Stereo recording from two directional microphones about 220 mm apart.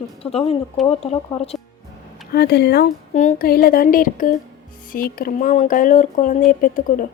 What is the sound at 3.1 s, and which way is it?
Speech, 35° left (ahead or behind).